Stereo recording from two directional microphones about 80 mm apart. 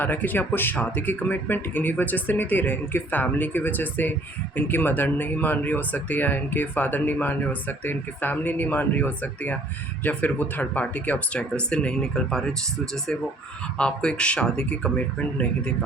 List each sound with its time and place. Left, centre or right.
0.0 s speech: left
13.7 s speech: centre